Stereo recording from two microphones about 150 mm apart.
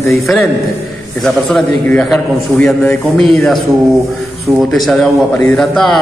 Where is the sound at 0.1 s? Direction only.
Centre (ahead or behind).